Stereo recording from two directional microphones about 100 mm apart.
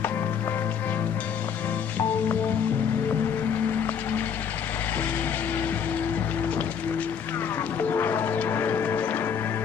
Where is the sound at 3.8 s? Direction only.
20° left (ahead or behind).